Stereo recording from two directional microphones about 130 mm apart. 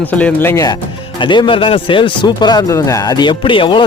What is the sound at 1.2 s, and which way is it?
A man's voice, 40° left (ahead or behind).